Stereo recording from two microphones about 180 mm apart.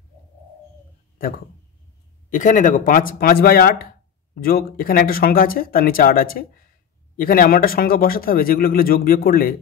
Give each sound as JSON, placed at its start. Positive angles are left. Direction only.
{"t": 2.2, "sound": "speech", "side_deg": 45}